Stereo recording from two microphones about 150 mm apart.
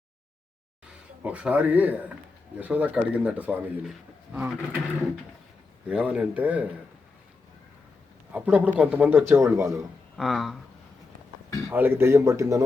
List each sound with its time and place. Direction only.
1.2 s speech: 10° right (ahead or behind)
5.9 s speech: 5° right (ahead or behind)
8.3 s speech: 10° right (ahead or behind)
10.2 s speech: centre (ahead or behind)
11.7 s a man's voice: 15° right (ahead or behind)